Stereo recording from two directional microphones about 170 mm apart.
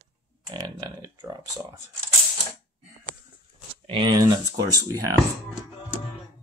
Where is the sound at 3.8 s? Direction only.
30° right (ahead or behind).